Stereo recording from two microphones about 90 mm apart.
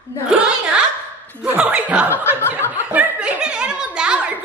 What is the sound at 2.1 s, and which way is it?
Chuckle, 25° left (ahead or behind).